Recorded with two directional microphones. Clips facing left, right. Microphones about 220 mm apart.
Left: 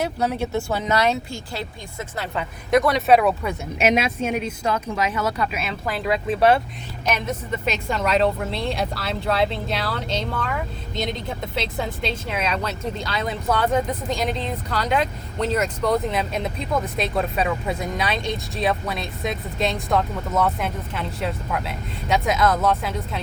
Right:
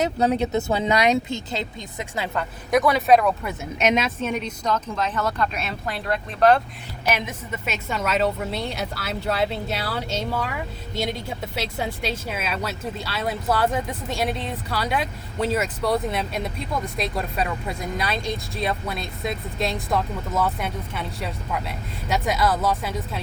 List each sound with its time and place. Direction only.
0.0 s speech: 20° right (ahead or behind)
2.3 s speech: centre (ahead or behind)
7.0 s speech: 10° right (ahead or behind)
11.5 s speech: 5° right (ahead or behind)